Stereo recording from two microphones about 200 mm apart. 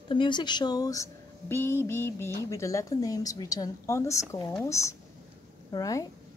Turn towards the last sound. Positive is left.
turn(degrees=15)  # may be behind; listen again after turning